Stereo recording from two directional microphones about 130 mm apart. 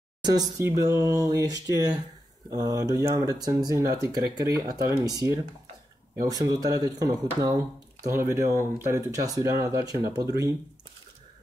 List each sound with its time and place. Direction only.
0.2 s speech: 30° right (ahead or behind)